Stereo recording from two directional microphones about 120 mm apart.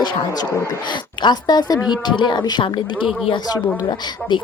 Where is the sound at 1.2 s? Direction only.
35° left (ahead or behind).